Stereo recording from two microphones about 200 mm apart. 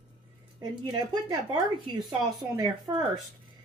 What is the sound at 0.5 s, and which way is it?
Speech, 15° right (ahead or behind).